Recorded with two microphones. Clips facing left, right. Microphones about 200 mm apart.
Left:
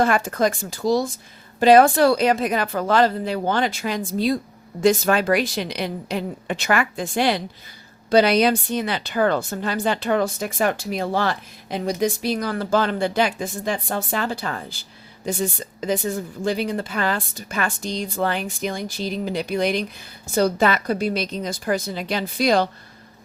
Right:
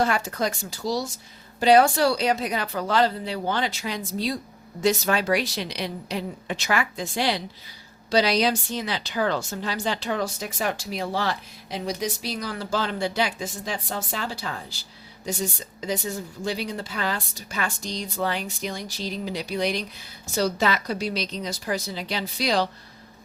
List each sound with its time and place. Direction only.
0.0 s a woman's voice: 55° left (ahead or behind)